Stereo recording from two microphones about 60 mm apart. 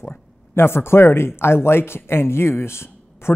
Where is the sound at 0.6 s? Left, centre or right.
Left.